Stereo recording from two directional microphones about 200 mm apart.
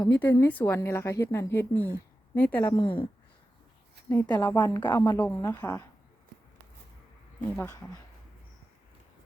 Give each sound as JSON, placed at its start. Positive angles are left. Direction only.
{"t": 0.2, "sound": "speech", "side_deg": 10}
{"t": 2.7, "sound": "a woman's voice", "side_deg": 25}
{"t": 4.1, "sound": "speech", "side_deg": 15}
{"t": 7.5, "sound": "speech", "side_deg": 10}